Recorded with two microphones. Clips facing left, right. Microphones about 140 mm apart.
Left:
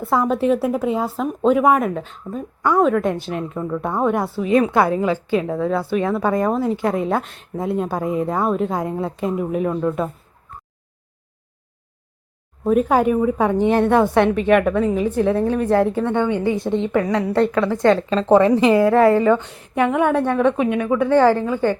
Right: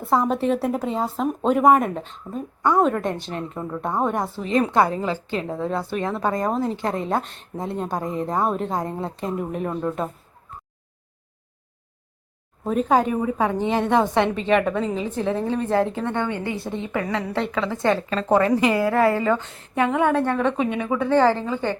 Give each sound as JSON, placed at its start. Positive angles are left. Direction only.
{"t": 0.0, "sound": "a woman's voice", "side_deg": 0}
{"t": 12.6, "sound": "a woman's voice", "side_deg": 10}
{"t": 13.7, "sound": "a woman's voice", "side_deg": -15}
{"t": 14.2, "sound": "a woman's voice", "side_deg": 10}
{"t": 15.3, "sound": "a woman's voice", "side_deg": -15}
{"t": 16.0, "sound": "a woman's voice", "side_deg": 10}
{"t": 18.1, "sound": "a woman's voice", "side_deg": 20}